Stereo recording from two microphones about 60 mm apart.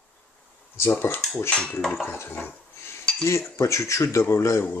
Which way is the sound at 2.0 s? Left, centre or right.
Left.